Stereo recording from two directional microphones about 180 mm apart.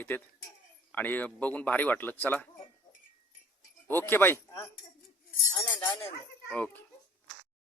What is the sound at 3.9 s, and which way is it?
Speech, 10° left (ahead or behind).